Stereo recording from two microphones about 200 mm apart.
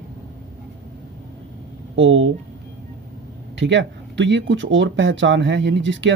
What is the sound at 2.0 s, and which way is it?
Speech, 70° right (ahead or behind).